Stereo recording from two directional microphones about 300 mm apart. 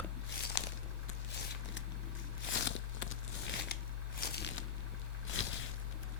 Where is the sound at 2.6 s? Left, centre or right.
Left.